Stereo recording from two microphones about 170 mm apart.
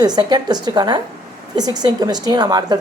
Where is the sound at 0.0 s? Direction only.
25° right (ahead or behind).